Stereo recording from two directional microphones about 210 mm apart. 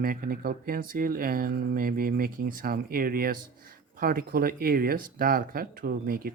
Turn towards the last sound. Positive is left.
turn(degrees=-45)  # may be behind; listen again after turning